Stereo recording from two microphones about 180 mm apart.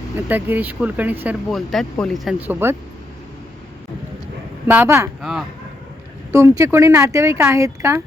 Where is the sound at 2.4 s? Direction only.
10° right (ahead or behind).